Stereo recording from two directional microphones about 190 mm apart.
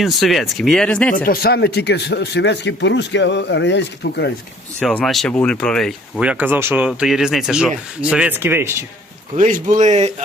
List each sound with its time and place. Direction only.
0.0 s speech: centre (ahead or behind)
1.1 s speech: 50° left (ahead or behind)
4.8 s speech: 5° left (ahead or behind)
9.3 s speech: 45° right (ahead or behind)